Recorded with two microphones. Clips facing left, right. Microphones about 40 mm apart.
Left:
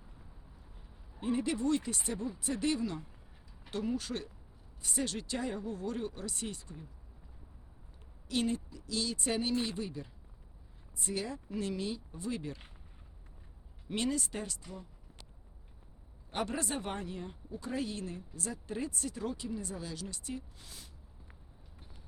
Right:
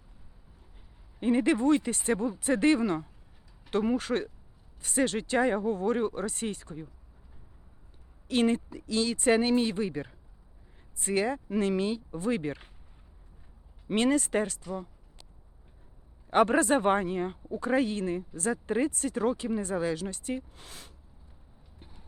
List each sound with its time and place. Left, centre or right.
1.2 s speech: right
8.3 s speech: right
13.8 s speech: right
16.3 s speech: right